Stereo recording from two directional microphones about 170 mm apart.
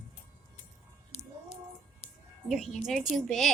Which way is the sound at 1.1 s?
35° left (ahead or behind).